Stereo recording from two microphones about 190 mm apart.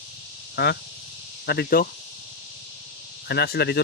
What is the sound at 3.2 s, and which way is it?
Speech, 55° left (ahead or behind).